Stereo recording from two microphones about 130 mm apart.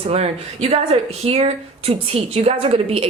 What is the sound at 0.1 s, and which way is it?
Speech, 50° right (ahead or behind).